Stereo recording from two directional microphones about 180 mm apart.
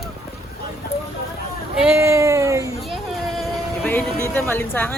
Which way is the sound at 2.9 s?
Centre (ahead or behind).